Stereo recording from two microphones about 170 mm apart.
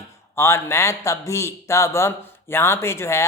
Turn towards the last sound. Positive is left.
turn(degrees=15)  # may be behind; listen again after turning